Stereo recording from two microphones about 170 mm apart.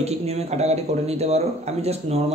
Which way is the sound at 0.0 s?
40° right (ahead or behind).